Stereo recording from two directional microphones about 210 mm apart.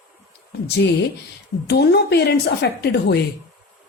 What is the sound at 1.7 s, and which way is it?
A woman's voice, 50° left (ahead or behind).